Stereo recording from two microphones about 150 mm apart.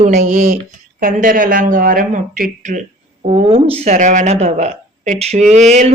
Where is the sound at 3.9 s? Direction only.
55° right (ahead or behind).